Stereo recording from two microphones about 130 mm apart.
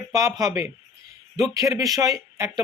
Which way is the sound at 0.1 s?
25° right (ahead or behind).